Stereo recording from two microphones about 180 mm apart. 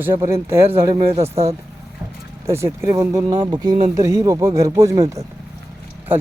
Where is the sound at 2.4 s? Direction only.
15° right (ahead or behind).